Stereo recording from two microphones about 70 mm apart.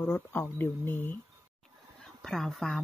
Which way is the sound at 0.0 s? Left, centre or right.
Left.